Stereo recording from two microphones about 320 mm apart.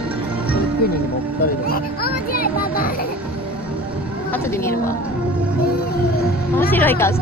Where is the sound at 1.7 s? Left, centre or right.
Left.